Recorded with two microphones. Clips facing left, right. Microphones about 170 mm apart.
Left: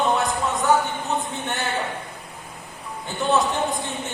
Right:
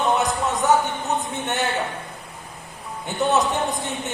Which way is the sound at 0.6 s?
20° right (ahead or behind).